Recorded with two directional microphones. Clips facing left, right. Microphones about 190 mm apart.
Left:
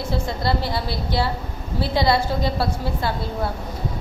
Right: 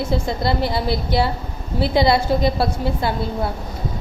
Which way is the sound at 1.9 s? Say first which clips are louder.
Right 3 dB; 15° right (ahead or behind).